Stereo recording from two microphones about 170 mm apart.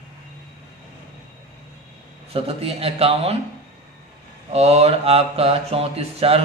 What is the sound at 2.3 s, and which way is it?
Mantra, 35° right (ahead or behind).